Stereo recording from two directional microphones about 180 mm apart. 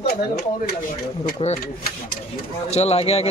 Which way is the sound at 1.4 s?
30° left (ahead or behind).